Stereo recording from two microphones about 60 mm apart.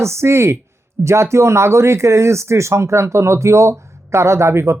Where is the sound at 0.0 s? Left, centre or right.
Right.